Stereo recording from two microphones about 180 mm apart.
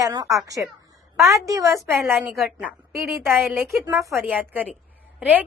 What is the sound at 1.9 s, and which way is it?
A woman's voice, centre (ahead or behind).